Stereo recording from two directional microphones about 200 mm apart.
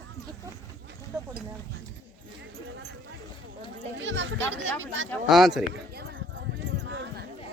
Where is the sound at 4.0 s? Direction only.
65° right (ahead or behind).